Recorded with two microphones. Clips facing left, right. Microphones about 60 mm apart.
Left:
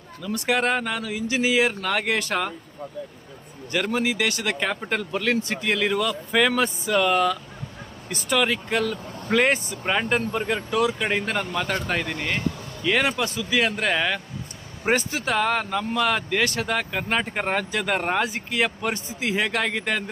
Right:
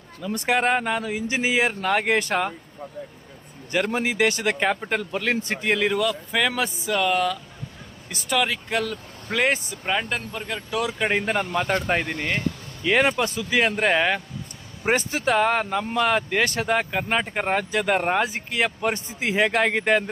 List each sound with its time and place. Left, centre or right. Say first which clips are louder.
0.5 s speech: right 2 dB; centre
1.6 s speech: right 2 dB; centre
3.7 s speech: even; centre
4.6 s speech: right 2 dB; centre
10.7 s speech: right 1 dB; centre